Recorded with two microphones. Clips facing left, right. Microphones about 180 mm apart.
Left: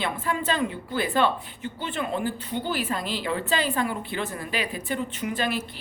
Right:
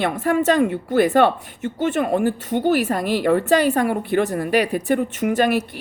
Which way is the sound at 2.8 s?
55° right (ahead or behind).